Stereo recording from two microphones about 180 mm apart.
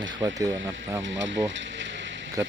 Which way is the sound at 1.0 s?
90° right.